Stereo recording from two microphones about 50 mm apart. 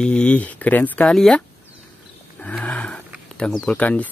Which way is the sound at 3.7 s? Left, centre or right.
Left.